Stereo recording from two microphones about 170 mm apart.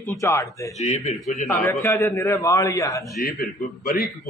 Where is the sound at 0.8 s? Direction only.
45° left (ahead or behind).